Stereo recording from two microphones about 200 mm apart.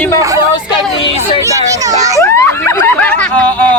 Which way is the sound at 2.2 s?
15° left (ahead or behind).